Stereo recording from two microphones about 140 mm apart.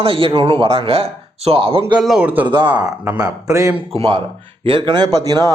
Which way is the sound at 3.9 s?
40° right (ahead or behind).